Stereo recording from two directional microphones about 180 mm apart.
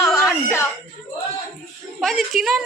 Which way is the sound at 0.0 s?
15° left (ahead or behind).